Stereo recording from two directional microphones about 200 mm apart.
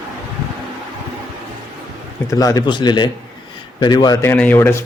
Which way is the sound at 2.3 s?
15° left (ahead or behind).